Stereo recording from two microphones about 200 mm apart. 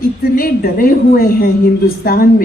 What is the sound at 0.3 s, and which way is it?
A woman's voice, 45° left (ahead or behind).